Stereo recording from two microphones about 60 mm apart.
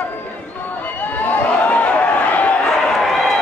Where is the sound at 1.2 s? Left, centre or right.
Left.